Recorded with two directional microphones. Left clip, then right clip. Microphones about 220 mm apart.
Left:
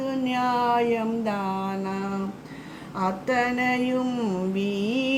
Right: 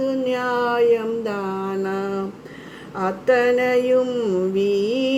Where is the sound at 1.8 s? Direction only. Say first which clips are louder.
Right 6 dB; 25° right (ahead or behind).